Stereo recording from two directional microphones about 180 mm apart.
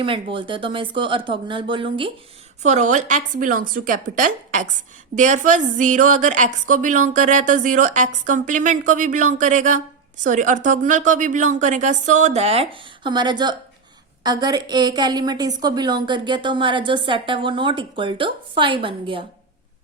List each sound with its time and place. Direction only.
0.0 s a woman's voice: 30° right (ahead or behind)
2.6 s a woman's voice: 40° right (ahead or behind)